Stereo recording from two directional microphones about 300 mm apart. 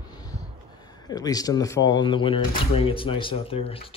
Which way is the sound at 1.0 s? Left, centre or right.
Centre.